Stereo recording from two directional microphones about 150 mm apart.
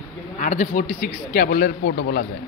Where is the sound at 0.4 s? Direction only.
55° left (ahead or behind).